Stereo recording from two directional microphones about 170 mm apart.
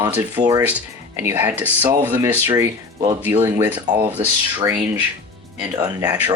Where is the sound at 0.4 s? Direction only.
25° right (ahead or behind).